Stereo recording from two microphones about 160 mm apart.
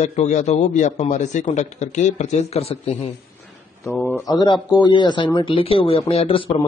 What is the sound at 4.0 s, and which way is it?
Speech, 10° left (ahead or behind).